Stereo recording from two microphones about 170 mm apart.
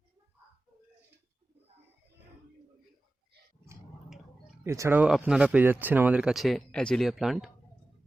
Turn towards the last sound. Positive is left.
turn(degrees=0)  # may be behind; listen again after turning